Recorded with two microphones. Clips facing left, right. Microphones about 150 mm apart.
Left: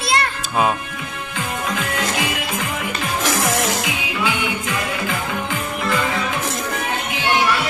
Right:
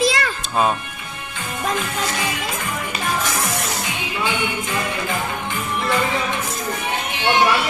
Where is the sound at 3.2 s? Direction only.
90° left.